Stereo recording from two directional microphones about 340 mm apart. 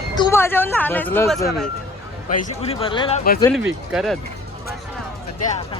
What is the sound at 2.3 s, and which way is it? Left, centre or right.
Speech, centre.